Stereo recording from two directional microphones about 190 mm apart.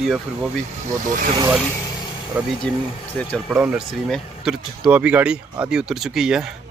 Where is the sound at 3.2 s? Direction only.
10° left (ahead or behind).